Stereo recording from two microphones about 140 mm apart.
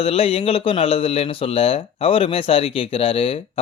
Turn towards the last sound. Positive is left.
turn(degrees=40)  # may be behind; listen again after turning